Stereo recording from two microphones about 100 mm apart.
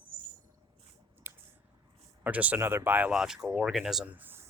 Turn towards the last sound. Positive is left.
turn(degrees=-20)  # may be behind; listen again after turning